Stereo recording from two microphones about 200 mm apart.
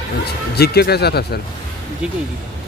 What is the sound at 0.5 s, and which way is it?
Speech, 55° left (ahead or behind).